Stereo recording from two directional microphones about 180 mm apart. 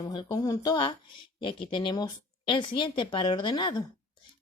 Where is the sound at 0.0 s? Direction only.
25° left (ahead or behind).